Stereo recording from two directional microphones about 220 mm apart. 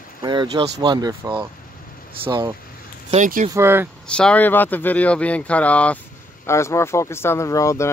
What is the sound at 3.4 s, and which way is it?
Speech, 10° right (ahead or behind).